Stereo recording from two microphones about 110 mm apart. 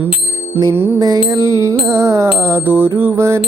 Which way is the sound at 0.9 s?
35° right (ahead or behind).